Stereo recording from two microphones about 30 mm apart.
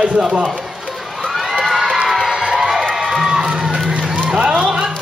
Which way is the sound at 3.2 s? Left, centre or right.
Right.